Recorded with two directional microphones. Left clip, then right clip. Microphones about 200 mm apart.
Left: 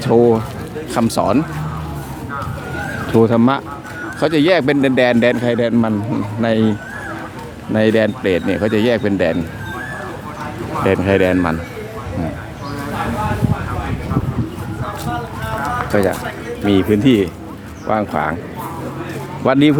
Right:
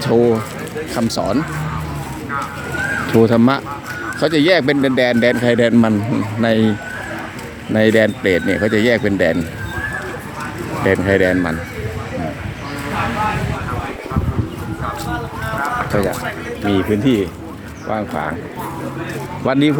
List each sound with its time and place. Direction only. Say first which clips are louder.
0.0 s speech: left 2 dB; 5° left (ahead or behind)
3.1 s a man's voice: left 1 dB; 5° right (ahead or behind)
10.8 s a man's voice: even; centre (ahead or behind)
15.9 s speech: left 2 dB; 15° left (ahead or behind)